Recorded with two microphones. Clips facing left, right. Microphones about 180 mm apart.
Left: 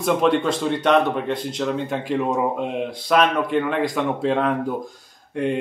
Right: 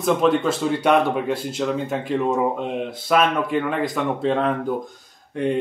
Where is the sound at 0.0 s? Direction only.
Centre (ahead or behind).